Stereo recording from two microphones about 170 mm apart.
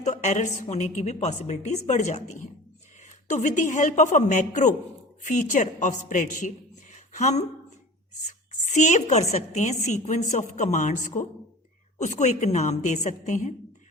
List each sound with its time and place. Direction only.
0.0 s a woman's voice: 40° left (ahead or behind)
6.9 s a sound: 45° left (ahead or behind)
8.3 s speech: 45° left (ahead or behind)